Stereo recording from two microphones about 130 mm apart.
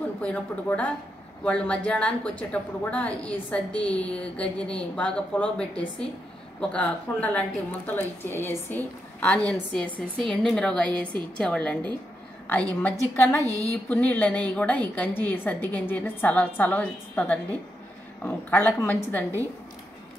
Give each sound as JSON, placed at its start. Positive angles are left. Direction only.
{"t": 0.2, "sound": "a woman's voice", "side_deg": 10}
{"t": 13.1, "sound": "a woman's voice", "side_deg": 15}
{"t": 13.4, "sound": "a sound", "side_deg": -25}
{"t": 13.7, "sound": "a woman's voice", "side_deg": 15}